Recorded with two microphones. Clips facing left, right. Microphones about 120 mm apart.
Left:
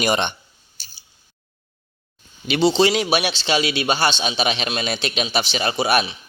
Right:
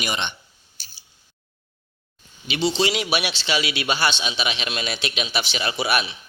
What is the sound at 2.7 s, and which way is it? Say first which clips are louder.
A man's voice: left 5 dB; 35° left (ahead or behind).